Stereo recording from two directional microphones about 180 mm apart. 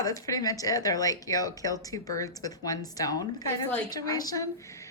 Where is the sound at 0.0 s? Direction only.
20° left (ahead or behind).